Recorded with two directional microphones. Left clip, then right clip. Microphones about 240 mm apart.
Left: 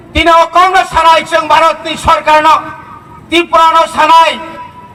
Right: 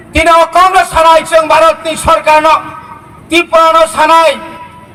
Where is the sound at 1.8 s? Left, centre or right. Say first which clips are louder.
Right 1 dB; right.